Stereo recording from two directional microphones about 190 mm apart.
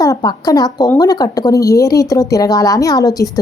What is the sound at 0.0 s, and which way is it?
Speech, 20° left (ahead or behind).